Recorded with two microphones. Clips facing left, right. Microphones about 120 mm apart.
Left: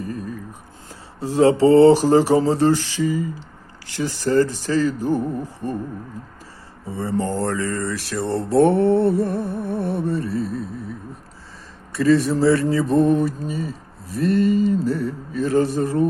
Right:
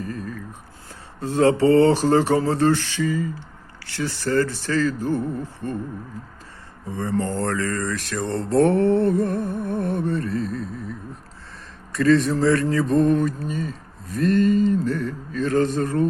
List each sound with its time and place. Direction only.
0.0 s a sound: 15° left (ahead or behind)
1.2 s speech: 15° left (ahead or behind)
7.1 s mantra: 25° left (ahead or behind)
7.4 s speech: 15° left (ahead or behind)
8.7 s mantra: 30° left (ahead or behind)
9.0 s music: 5° left (ahead or behind)
11.9 s speech: 5° left (ahead or behind)